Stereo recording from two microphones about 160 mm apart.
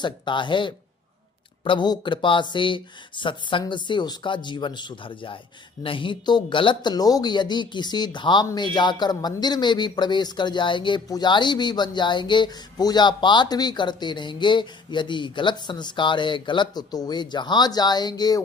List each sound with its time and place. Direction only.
0.0 s speech: 30° left (ahead or behind)